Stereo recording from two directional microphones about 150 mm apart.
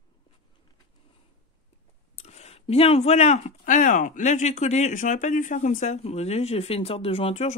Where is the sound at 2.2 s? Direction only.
45° left (ahead or behind).